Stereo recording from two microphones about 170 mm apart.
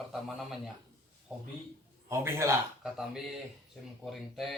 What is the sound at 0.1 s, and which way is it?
Speech, centre (ahead or behind).